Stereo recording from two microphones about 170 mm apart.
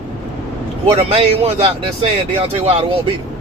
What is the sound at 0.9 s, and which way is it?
Speech, 35° right (ahead or behind).